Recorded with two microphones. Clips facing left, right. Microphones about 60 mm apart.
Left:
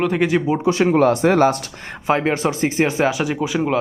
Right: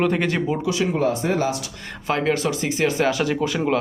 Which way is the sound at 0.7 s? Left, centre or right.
Left.